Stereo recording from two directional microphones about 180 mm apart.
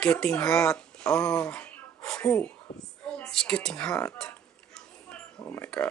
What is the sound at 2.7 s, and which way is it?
Speech, 60° left (ahead or behind).